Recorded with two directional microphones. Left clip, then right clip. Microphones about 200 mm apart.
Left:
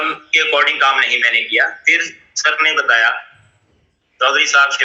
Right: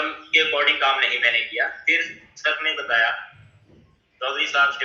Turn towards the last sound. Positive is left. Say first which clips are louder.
# left 8 dB
turn(degrees=50)  # may be behind; listen again after turning